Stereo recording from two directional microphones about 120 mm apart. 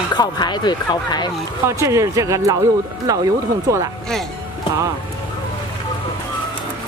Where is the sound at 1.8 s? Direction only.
25° right (ahead or behind).